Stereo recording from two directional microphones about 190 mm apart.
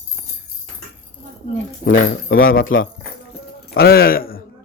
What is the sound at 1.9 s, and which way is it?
Speech, 45° left (ahead or behind).